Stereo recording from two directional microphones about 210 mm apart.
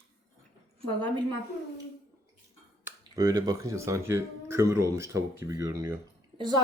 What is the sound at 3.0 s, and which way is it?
Speech, 20° right (ahead or behind).